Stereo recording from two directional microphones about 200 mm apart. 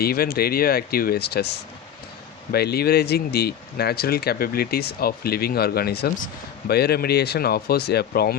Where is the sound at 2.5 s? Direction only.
50° left (ahead or behind).